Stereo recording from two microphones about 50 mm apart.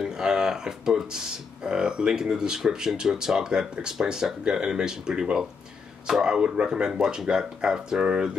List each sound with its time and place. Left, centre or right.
0.0 s speech: centre